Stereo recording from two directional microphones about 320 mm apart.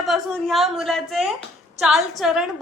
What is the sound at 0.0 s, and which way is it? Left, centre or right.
A woman's voice, centre.